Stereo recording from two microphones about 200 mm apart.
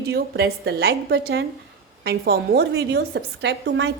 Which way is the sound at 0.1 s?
50° right (ahead or behind).